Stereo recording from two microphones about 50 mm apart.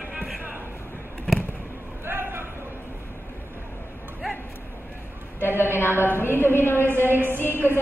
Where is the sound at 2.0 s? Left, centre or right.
Right.